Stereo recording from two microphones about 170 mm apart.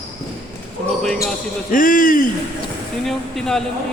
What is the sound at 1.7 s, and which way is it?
Speech, 50° left (ahead or behind).